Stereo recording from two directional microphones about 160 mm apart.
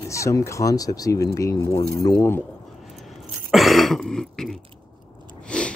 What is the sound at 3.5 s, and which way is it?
Speech, centre (ahead or behind).